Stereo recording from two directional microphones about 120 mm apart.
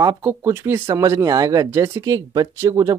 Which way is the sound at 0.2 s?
20° right (ahead or behind).